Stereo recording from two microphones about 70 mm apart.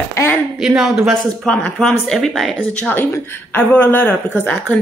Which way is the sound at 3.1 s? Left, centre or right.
Left.